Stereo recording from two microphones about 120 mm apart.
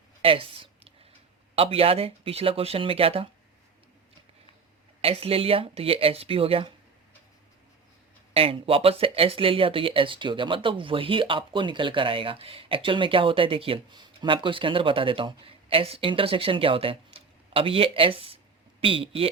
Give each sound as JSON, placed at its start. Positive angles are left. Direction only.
{"t": 0.2, "sound": "a sound", "side_deg": -50}
{"t": 1.5, "sound": "speech", "side_deg": -55}
{"t": 5.0, "sound": "speech", "side_deg": -55}
{"t": 8.3, "sound": "speech", "side_deg": -50}